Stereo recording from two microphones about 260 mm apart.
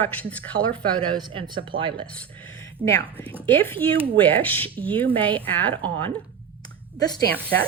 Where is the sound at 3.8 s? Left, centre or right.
Centre.